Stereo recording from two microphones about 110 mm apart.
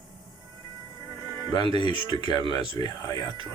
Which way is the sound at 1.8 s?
50° left (ahead or behind).